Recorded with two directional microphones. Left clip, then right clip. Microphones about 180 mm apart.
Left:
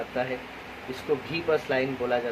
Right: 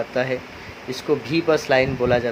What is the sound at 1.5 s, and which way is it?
Speech, 65° right (ahead or behind).